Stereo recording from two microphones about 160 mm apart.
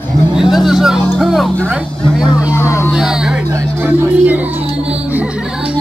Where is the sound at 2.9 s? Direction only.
5° right (ahead or behind).